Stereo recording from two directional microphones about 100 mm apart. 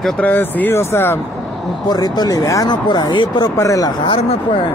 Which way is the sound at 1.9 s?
45° left (ahead or behind).